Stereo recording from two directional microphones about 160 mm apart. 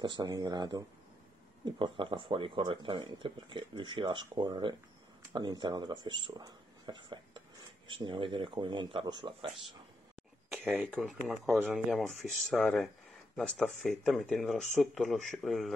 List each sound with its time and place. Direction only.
0.0 s speech: 25° right (ahead or behind)
10.5 s a sound: 10° right (ahead or behind)
10.9 s speech: centre (ahead or behind)